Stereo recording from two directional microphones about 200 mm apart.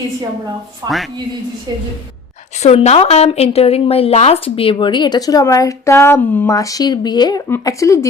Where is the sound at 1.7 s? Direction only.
20° right (ahead or behind).